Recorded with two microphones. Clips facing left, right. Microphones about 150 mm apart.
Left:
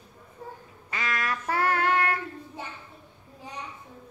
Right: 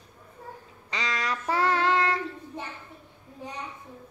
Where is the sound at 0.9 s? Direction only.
20° right (ahead or behind).